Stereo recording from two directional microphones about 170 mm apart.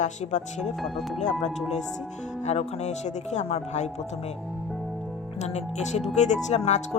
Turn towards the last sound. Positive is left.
turn(degrees=40)  # may be behind; listen again after turning